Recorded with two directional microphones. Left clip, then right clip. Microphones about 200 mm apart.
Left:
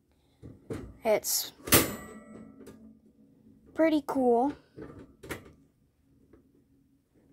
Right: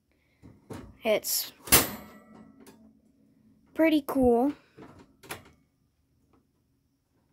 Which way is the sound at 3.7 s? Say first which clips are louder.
Right 2 dB; 15° right (ahead or behind).